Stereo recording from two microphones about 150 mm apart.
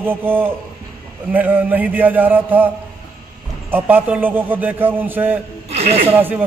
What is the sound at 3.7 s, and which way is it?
Speech, 10° right (ahead or behind).